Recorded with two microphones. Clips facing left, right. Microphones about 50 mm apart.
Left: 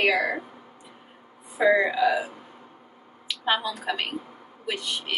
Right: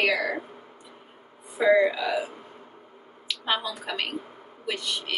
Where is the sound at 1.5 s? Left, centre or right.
Left.